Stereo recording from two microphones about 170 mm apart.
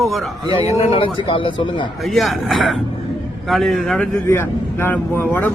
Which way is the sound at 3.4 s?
Centre (ahead or behind).